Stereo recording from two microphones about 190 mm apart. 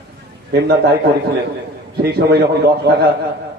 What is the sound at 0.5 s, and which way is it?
Speech, 60° right (ahead or behind).